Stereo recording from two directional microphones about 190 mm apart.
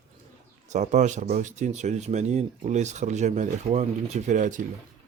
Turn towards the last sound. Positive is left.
turn(degrees=-40)  # may be behind; listen again after turning